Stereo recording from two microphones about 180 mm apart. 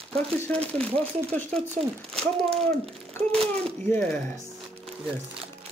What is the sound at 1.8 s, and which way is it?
Speech, 40° right (ahead or behind).